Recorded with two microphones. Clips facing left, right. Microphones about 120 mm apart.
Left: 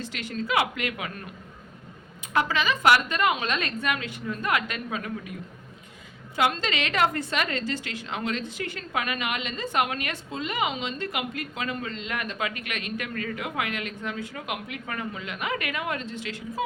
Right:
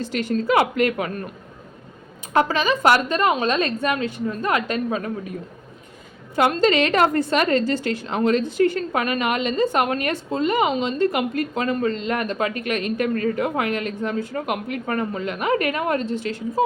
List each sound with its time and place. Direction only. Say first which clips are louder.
0.0 s a woman's voice: right 10 dB; 40° right (ahead or behind)
2.3 s a woman's voice: right 6 dB; 40° right (ahead or behind)
6.3 s a woman's voice: right 8 dB; 45° right (ahead or behind)